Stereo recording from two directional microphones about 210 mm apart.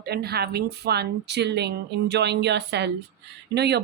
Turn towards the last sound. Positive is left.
turn(degrees=-50)  # may be behind; listen again after turning